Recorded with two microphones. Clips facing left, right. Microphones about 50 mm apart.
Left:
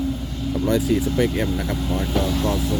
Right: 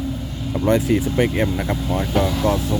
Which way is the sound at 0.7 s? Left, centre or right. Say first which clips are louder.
Right 3 dB; right.